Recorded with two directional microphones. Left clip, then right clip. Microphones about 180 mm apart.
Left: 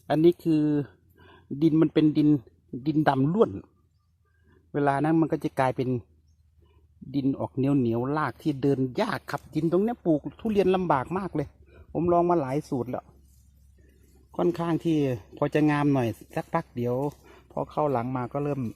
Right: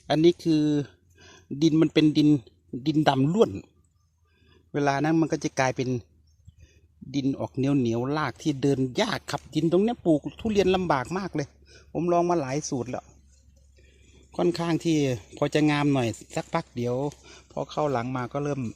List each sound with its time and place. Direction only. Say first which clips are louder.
0.1 s a man's voice: even; 5° right (ahead or behind)
4.7 s speech: even; centre (ahead or behind)
7.1 s a man's voice: even; centre (ahead or behind)
14.3 s speech: right 1 dB; 5° right (ahead or behind)